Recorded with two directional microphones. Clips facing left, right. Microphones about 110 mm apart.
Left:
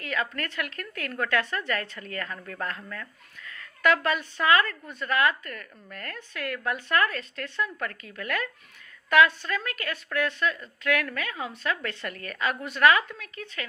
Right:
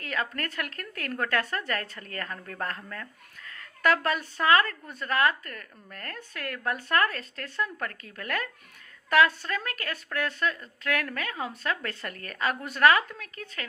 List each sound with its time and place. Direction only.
0.0 s speech: 40° right (ahead or behind)